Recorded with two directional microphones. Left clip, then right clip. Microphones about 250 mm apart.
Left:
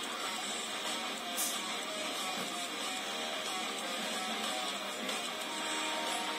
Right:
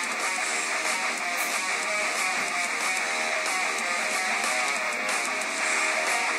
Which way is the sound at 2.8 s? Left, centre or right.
Right.